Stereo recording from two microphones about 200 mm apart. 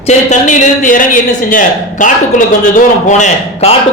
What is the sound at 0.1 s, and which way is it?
A man's voice, 35° left (ahead or behind).